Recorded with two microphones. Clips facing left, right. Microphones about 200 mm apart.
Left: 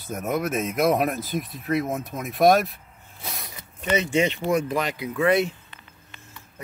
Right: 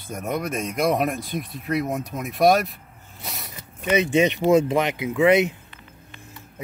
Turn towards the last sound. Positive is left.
turn(degrees=-20)  # may be behind; listen again after turning